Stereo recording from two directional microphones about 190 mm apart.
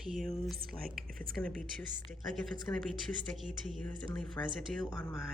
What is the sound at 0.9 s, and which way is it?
Speech, 50° right (ahead or behind).